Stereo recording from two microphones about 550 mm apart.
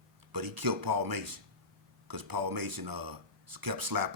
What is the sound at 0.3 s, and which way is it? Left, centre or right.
Speech, right.